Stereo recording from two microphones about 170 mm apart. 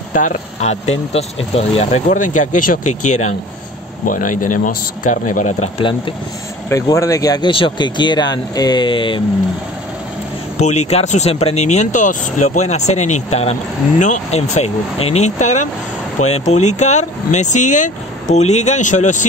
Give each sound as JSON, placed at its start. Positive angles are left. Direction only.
{"t": 0.1, "sound": "speech", "side_deg": 45}
{"t": 6.7, "sound": "speech", "side_deg": 20}
{"t": 10.6, "sound": "speech", "side_deg": 40}